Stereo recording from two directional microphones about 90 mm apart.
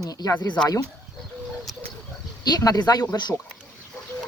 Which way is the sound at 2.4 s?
45° left (ahead or behind).